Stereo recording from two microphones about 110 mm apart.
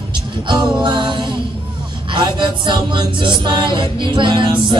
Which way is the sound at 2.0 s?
45° right (ahead or behind).